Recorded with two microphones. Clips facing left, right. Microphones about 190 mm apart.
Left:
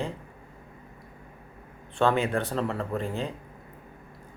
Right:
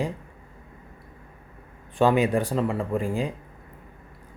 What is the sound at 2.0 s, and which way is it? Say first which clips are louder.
Speech: right 4 dB; 15° right (ahead or behind).